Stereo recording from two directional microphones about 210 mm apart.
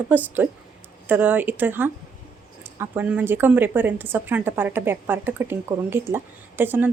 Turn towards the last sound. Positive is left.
turn(degrees=-10)  # may be behind; listen again after turning